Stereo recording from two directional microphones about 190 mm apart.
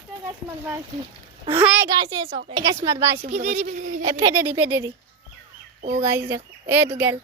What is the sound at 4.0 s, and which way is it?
Speech, 15° right (ahead or behind).